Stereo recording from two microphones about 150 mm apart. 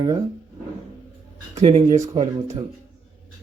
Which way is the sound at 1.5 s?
45° right (ahead or behind).